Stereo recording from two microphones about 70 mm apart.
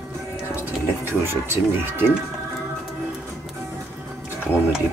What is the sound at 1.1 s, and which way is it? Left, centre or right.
Speech, right.